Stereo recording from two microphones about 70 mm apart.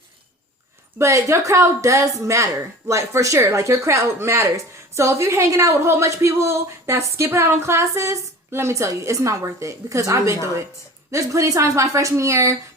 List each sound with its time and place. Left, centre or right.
0.9 s speech: right